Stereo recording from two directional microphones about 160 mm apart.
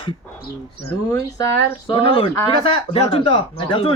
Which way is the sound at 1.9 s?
35° left (ahead or behind).